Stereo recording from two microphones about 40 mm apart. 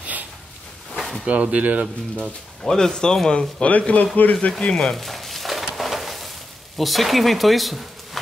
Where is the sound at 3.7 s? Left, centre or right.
Left.